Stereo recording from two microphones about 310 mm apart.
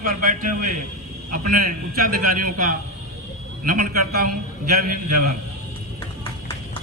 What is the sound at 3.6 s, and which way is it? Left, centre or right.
Speech, right.